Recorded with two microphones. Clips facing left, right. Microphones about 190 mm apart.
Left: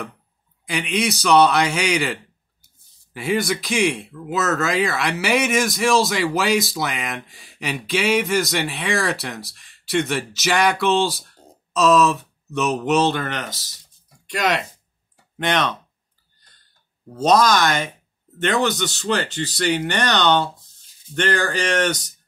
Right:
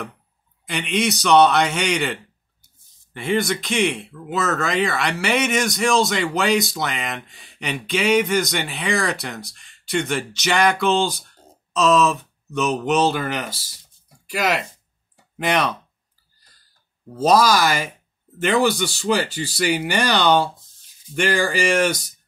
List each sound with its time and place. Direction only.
0.7 s speech: centre (ahead or behind)
17.1 s speech: 5° right (ahead or behind)